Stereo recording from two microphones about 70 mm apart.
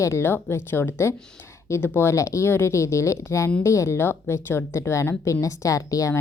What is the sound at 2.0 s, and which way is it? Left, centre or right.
A woman's voice, left.